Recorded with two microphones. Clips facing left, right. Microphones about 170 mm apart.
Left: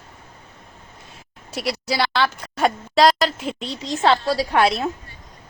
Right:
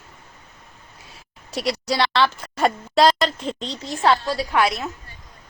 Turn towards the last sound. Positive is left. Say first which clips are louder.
# left 3 dB
turn(degrees=30)  # may be behind; listen again after turning